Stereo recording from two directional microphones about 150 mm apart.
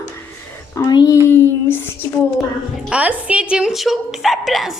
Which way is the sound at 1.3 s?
15° left (ahead or behind).